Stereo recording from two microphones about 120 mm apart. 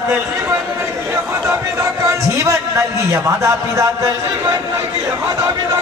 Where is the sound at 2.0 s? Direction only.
25° right (ahead or behind).